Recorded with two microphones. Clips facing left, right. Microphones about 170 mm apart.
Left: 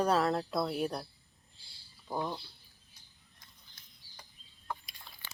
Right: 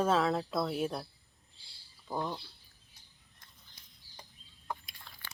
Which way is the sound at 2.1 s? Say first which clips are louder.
Even; 5° left (ahead or behind).